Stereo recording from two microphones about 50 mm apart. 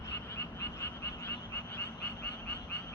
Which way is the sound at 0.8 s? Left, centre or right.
Left.